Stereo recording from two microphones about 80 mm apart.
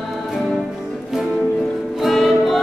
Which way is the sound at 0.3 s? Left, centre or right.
Centre.